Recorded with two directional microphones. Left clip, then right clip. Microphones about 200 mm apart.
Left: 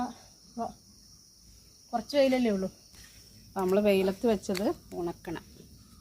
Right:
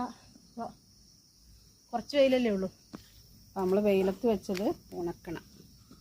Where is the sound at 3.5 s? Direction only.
10° left (ahead or behind).